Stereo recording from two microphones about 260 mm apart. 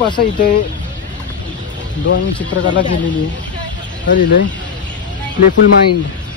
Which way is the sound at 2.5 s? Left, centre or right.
Left.